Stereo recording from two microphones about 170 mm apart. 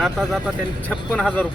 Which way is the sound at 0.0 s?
Centre (ahead or behind).